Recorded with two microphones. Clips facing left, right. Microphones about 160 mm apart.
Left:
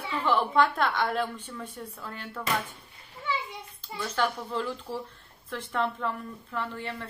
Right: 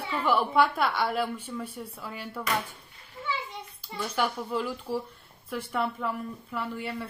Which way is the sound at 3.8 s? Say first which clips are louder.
Even; 10° right (ahead or behind).